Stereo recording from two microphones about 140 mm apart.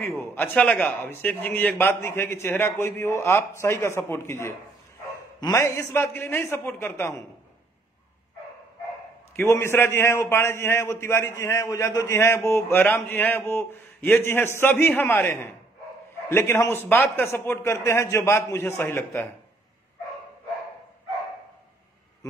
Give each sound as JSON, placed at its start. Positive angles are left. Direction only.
{"t": 0.3, "sound": "a man's voice", "side_deg": 10}
{"t": 9.3, "sound": "a man's voice", "side_deg": 15}